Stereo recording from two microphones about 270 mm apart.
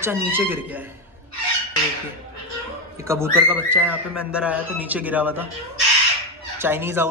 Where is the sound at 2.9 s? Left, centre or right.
Centre.